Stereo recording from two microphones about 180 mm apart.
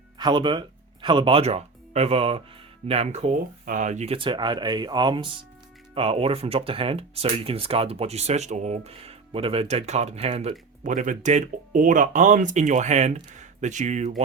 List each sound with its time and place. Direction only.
0.2 s speech: 25° right (ahead or behind); by 14.1 s 40° right (ahead or behind)